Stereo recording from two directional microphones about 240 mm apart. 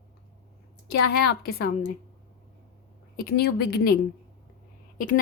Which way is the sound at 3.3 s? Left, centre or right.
Left.